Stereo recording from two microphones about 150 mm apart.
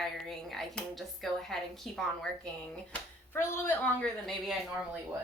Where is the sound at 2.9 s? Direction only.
15° left (ahead or behind).